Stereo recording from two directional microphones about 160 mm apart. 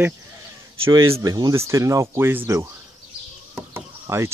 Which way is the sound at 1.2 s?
25° right (ahead or behind).